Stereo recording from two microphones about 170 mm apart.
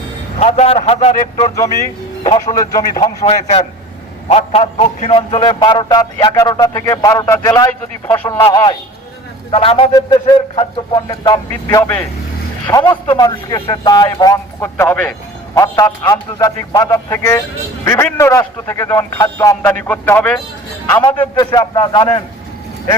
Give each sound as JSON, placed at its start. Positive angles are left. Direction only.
{"t": 0.3, "sound": "speech", "side_deg": 40}
{"t": 1.5, "sound": "a man's voice", "side_deg": 20}
{"t": 3.2, "sound": "a man's voice", "side_deg": 40}
{"t": 8.4, "sound": "a man's voice", "side_deg": 25}
{"t": 9.9, "sound": "a man's voice", "side_deg": 25}
{"t": 14.6, "sound": "a man's voice", "side_deg": 10}
{"t": 20.9, "sound": "a man's voice", "side_deg": 25}